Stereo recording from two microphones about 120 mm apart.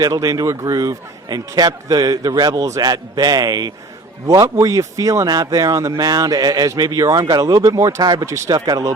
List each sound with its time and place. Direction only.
0.0 s a man's voice: 30° right (ahead or behind)